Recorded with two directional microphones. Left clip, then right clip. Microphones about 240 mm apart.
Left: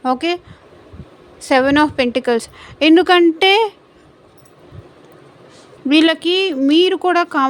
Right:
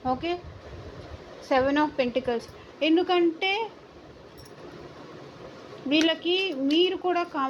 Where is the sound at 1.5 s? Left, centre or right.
Left.